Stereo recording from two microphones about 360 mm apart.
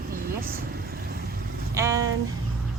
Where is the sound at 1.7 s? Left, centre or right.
Centre.